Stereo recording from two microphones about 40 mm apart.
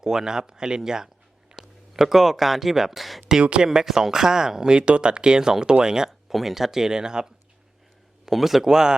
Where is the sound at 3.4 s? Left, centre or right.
Right.